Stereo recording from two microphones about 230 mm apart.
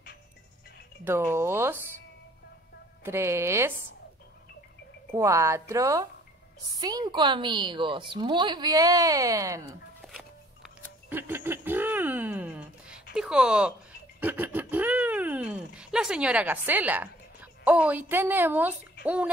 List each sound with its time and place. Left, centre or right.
1.0 s speech: centre
3.0 s speech: centre
5.1 s a woman's voice: centre
11.1 s a sound: centre
13.1 s speech: centre